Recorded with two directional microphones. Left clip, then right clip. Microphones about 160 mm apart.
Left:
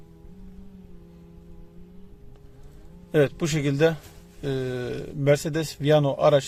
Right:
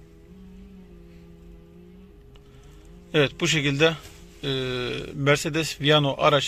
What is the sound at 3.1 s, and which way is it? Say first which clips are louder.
Speech: right 1 dB; 30° left (ahead or behind).